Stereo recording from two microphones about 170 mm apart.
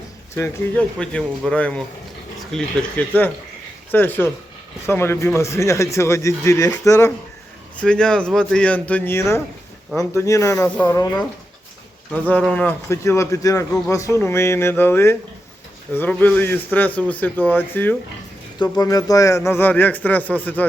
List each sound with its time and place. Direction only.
0.3 s a man's voice: 10° left (ahead or behind)
7.8 s a man's voice: 5° left (ahead or behind); by 11.3 s 20° left (ahead or behind)
12.3 s a man's voice: 5° left (ahead or behind)